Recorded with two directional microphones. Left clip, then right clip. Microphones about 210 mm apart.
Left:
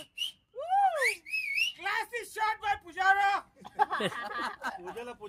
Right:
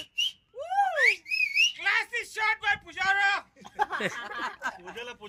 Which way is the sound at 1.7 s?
50° left (ahead or behind).